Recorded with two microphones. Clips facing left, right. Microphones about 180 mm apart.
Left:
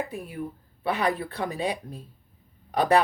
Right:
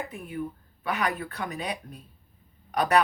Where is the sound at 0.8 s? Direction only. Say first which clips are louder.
Left 3 dB; 30° left (ahead or behind).